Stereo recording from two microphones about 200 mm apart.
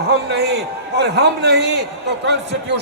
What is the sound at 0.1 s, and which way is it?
A man's voice, 55° right (ahead or behind).